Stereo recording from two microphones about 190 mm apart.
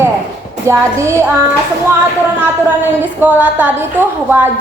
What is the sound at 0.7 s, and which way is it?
Speech, 15° right (ahead or behind).